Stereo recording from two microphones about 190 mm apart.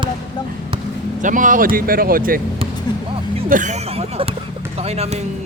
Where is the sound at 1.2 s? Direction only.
45° right (ahead or behind).